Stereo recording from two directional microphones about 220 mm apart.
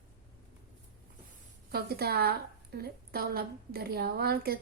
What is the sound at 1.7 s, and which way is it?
A woman's voice, 45° right (ahead or behind).